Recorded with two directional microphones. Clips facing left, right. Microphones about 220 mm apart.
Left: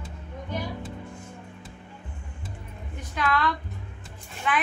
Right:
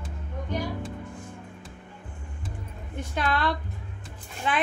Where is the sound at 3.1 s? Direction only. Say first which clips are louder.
Left 1 dB; 30° right (ahead or behind).